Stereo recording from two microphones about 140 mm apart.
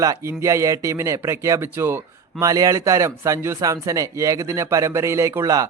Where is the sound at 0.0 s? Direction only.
25° right (ahead or behind).